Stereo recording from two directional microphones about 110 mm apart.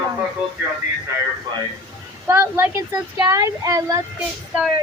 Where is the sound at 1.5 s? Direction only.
45° right (ahead or behind).